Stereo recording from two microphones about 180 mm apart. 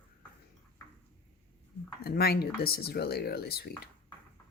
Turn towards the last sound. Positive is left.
turn(degrees=60)  # may be behind; listen again after turning